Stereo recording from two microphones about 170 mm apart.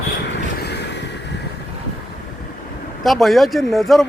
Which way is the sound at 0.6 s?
85° left.